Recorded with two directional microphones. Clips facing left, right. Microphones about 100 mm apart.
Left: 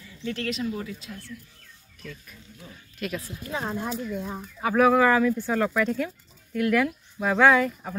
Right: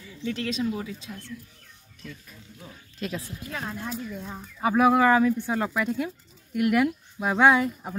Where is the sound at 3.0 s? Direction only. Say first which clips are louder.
Left 1 dB; 30° right (ahead or behind).